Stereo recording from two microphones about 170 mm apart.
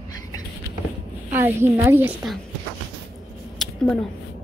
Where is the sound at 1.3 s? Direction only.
15° right (ahead or behind).